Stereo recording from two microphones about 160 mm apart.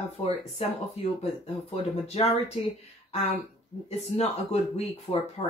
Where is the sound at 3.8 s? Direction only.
45° left (ahead or behind).